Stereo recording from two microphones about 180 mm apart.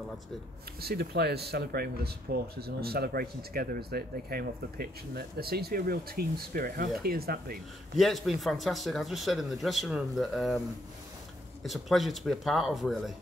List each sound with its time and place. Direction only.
0.7 s speech: 60° right (ahead or behind)
8.0 s speech: centre (ahead or behind)
11.6 s speech: centre (ahead or behind)